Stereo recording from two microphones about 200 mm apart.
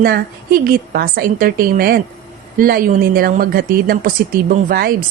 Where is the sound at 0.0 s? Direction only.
50° right (ahead or behind).